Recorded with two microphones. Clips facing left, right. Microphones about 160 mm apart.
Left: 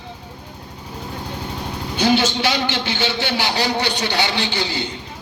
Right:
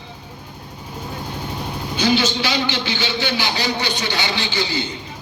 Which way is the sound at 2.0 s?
60° left (ahead or behind).